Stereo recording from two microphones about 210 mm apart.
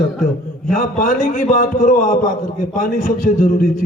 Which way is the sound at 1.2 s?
35° left (ahead or behind).